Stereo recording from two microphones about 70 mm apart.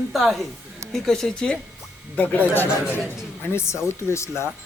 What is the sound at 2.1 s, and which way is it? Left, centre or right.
Speech, left.